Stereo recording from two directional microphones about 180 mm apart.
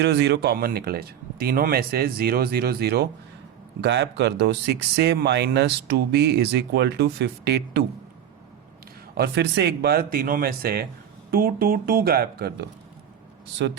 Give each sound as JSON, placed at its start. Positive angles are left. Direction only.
{"t": 0.0, "sound": "speech", "side_deg": -70}
{"t": 9.1, "sound": "speech", "side_deg": -65}
{"t": 13.6, "sound": "speech", "side_deg": -75}